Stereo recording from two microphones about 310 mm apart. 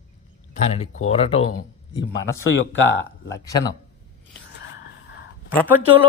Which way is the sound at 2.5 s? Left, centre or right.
Left.